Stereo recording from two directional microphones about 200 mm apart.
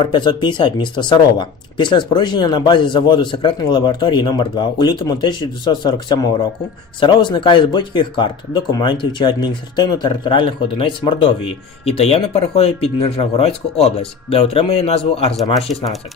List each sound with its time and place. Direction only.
0.0 s speech: 20° left (ahead or behind)